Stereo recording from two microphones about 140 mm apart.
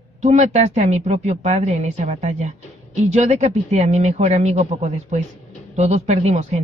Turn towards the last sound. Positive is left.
turn(degrees=-60)  # may be behind; listen again after turning